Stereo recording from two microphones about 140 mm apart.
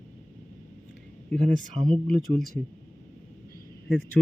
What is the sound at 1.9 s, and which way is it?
Speech, 5° left (ahead or behind).